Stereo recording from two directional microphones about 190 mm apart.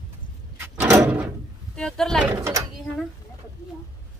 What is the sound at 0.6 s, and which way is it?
Door, 10° right (ahead or behind).